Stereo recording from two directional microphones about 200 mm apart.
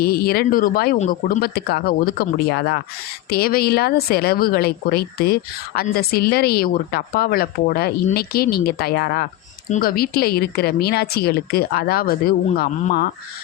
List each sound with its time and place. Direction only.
0.0 s speech: 50° left (ahead or behind)
0.9 s speech: 35° left (ahead or behind)
1.4 s speech: 50° left (ahead or behind)